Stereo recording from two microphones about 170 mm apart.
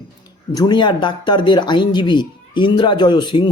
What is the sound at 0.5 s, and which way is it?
Speech, 25° left (ahead or behind).